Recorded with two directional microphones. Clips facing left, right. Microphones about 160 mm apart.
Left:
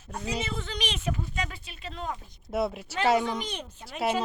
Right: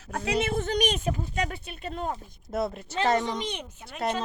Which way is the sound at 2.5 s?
5° left (ahead or behind).